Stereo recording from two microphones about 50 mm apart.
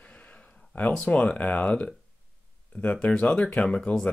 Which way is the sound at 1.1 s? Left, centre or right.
Left.